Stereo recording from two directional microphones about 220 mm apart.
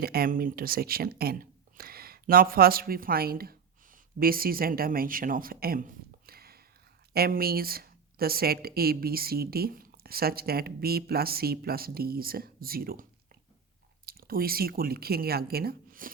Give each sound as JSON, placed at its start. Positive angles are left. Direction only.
{"t": 0.0, "sound": "speech", "side_deg": -45}
{"t": 6.2, "sound": "a sound", "side_deg": -45}
{"t": 7.1, "sound": "speech", "side_deg": -45}